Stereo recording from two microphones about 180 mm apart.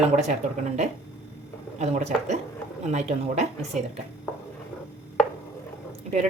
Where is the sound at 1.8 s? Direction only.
40° right (ahead or behind).